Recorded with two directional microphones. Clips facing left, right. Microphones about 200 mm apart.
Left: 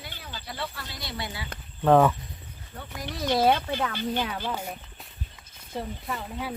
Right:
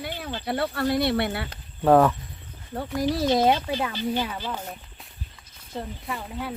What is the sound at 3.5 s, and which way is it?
Speech, 10° right (ahead or behind).